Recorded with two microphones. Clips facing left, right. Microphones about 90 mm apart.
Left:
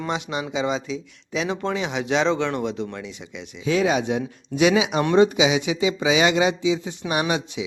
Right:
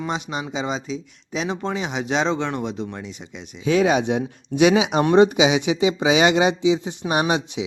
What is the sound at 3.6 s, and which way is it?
Speech, 25° right (ahead or behind).